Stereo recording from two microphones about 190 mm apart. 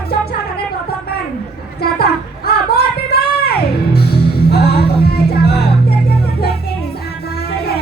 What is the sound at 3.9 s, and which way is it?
Music, 55° left (ahead or behind).